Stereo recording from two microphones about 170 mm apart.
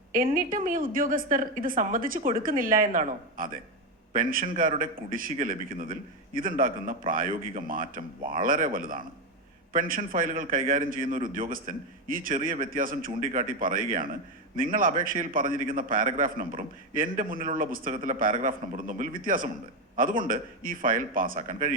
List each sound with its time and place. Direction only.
0.3 s a woman's voice: 55° right (ahead or behind)